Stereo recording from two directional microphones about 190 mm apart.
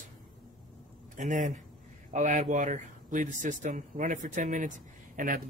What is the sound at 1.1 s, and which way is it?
Speech, 40° right (ahead or behind).